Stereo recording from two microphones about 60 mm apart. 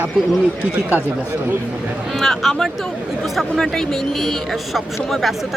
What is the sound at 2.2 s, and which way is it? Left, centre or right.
Speech, centre.